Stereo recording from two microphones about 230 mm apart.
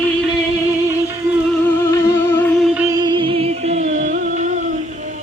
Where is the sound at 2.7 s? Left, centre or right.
Centre.